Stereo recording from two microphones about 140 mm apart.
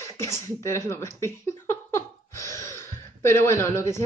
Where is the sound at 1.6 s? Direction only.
15° left (ahead or behind).